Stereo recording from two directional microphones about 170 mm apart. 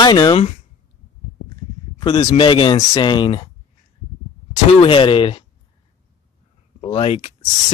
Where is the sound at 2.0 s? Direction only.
25° left (ahead or behind).